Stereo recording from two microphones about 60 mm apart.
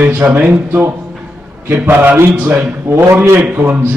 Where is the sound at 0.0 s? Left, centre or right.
Right.